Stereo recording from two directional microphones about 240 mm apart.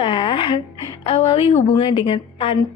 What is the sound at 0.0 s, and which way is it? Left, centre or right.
A woman's voice, left.